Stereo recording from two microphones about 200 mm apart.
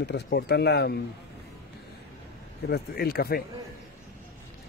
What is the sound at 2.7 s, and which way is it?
Speech, 50° left (ahead or behind).